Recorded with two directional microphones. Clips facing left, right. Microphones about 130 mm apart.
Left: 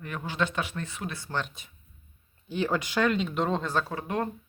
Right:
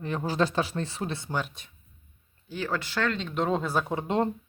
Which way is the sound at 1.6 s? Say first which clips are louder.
Even; centre (ahead or behind).